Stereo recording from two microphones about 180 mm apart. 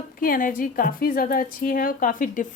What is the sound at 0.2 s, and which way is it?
A woman's voice, 50° left (ahead or behind).